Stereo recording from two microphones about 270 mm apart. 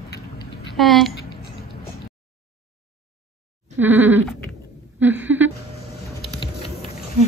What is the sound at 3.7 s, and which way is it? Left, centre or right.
Goat, centre.